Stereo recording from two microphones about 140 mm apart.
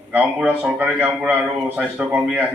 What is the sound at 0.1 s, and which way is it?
A man's voice, 10° right (ahead or behind).